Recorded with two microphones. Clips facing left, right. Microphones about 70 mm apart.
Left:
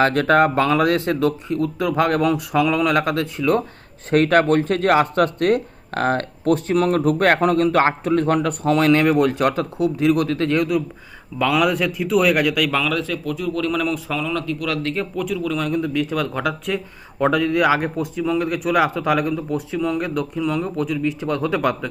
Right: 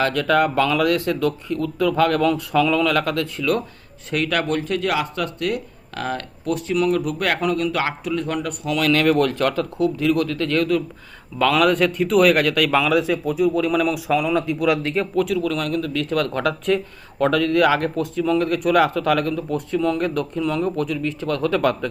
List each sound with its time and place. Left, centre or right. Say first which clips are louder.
0.0 s speech: left 3 dB; left
4.1 s speech: left 6 dB; left; by 10.8 s centre
11.3 s a man's voice: right 2 dB; centre
14.9 s a man's voice: right 3 dB; centre
15.7 s speech: left 1 dB; centre